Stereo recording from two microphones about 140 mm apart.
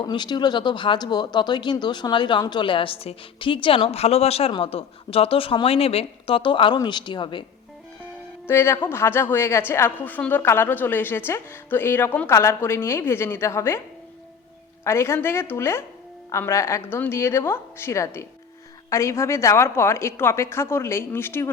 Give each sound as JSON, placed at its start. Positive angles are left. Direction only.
{"t": 0.0, "sound": "speech", "side_deg": 30}
{"t": 8.4, "sound": "a woman's voice", "side_deg": 15}
{"t": 14.8, "sound": "a woman's voice", "side_deg": 20}